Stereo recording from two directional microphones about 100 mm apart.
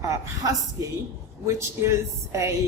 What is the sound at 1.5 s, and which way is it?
Speech, 30° right (ahead or behind).